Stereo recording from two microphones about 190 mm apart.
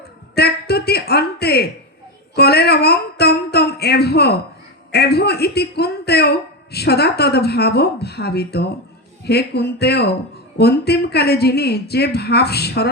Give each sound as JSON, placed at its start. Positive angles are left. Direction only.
{"t": 0.3, "sound": "speech", "side_deg": 55}
{"t": 2.3, "sound": "a sound", "side_deg": 55}
{"t": 4.9, "sound": "a man's voice", "side_deg": 55}